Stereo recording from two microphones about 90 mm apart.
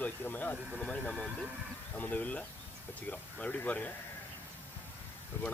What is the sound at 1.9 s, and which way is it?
Speech, 15° left (ahead or behind).